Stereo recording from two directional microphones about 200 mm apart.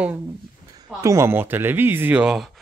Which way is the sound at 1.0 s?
15° right (ahead or behind).